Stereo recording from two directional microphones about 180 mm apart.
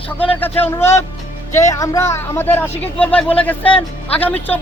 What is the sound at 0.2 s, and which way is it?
Speech, 10° left (ahead or behind).